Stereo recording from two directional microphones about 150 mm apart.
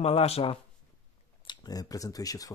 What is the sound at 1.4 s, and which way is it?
Speech, 30° left (ahead or behind).